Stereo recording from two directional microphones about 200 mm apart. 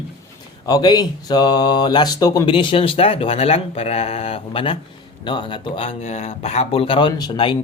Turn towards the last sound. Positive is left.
turn(degrees=25)  # may be behind; listen again after turning